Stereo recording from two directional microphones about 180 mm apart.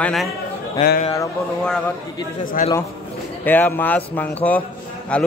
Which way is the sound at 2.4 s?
50° left (ahead or behind).